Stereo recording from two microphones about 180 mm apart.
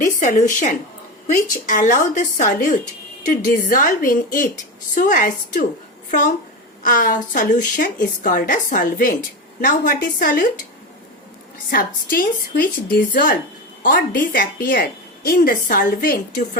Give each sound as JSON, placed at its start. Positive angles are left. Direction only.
{"t": 0.0, "sound": "a woman's voice", "side_deg": 45}
{"t": 6.8, "sound": "a woman's voice", "side_deg": 50}
{"t": 11.7, "sound": "a woman's voice", "side_deg": 55}